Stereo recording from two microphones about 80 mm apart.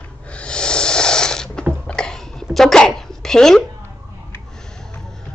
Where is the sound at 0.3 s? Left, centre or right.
Centre.